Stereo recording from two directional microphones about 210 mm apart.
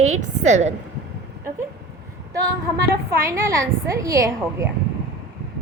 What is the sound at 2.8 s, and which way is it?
A woman's voice, 10° right (ahead or behind).